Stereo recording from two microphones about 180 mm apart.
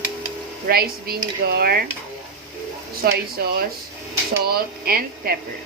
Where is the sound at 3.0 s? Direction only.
60° right (ahead or behind).